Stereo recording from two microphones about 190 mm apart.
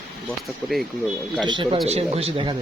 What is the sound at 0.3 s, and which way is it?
Speech, centre (ahead or behind).